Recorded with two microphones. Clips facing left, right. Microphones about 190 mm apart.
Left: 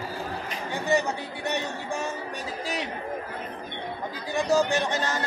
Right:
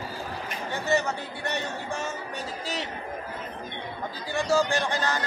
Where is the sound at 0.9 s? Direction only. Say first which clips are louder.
Left 1 dB; 15° left (ahead or behind).